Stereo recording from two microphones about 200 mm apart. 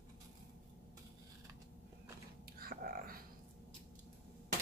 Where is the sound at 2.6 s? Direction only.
45° right (ahead or behind).